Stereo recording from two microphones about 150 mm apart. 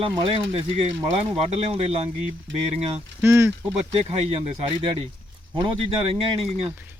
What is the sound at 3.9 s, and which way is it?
Speech, 45° right (ahead or behind).